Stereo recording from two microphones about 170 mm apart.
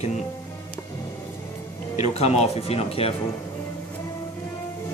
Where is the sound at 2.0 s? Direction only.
40° left (ahead or behind).